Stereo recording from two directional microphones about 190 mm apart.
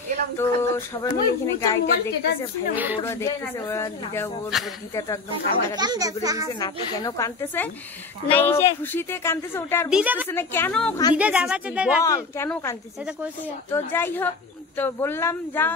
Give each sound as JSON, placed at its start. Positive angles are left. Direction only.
{"t": 0.4, "sound": "speech", "side_deg": 15}
{"t": 1.9, "sound": "a woman's voice", "side_deg": 55}
{"t": 2.7, "sound": "speech", "side_deg": -10}
{"t": 3.1, "sound": "speech", "side_deg": 15}
{"t": 4.5, "sound": "speech", "side_deg": 0}
{"t": 4.9, "sound": "speech", "side_deg": 15}
{"t": 5.8, "sound": "a child's voice", "side_deg": -20}
{"t": 6.5, "sound": "speech", "side_deg": 20}
{"t": 9.8, "sound": "speech", "side_deg": -5}
{"t": 10.2, "sound": "speech", "side_deg": 10}
{"t": 11.1, "sound": "speech", "side_deg": -5}
{"t": 12.0, "sound": "speech", "side_deg": 15}